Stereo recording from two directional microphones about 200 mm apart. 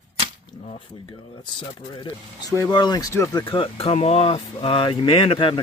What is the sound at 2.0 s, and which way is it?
Speech, 15° left (ahead or behind).